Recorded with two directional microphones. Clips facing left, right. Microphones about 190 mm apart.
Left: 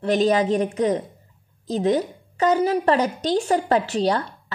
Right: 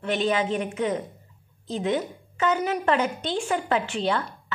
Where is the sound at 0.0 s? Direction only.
40° left (ahead or behind).